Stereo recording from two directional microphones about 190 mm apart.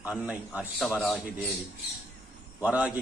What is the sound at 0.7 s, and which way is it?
Mantra, 5° left (ahead or behind).